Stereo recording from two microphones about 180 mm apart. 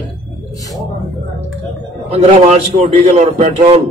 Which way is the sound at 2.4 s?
40° right (ahead or behind).